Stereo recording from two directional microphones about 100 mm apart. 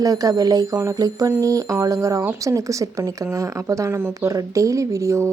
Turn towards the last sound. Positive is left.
turn(degrees=-30)  # may be behind; listen again after turning